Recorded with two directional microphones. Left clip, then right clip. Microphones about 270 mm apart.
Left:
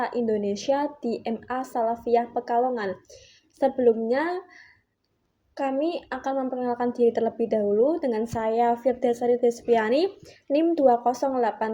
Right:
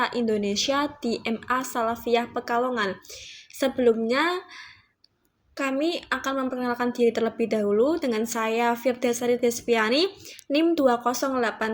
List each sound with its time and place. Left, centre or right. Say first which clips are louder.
0.0 s a woman's voice: right 1 dB; right